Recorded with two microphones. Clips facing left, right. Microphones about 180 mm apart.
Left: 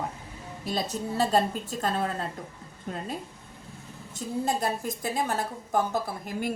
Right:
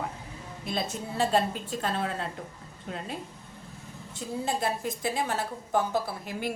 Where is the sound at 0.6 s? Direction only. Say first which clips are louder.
Left 2 dB; 40° left (ahead or behind).